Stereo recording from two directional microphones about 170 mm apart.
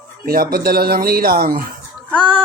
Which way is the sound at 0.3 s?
60° right (ahead or behind).